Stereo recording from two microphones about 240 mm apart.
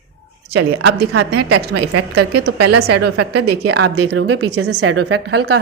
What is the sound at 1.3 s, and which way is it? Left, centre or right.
A woman's voice, right.